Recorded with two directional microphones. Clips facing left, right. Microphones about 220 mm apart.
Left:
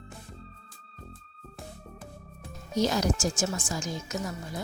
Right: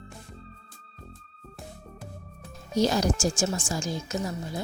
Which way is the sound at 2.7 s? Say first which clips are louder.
Right 2 dB; 30° right (ahead or behind).